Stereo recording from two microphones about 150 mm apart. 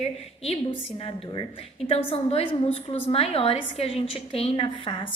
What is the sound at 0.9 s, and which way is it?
A woman's voice, 35° left (ahead or behind).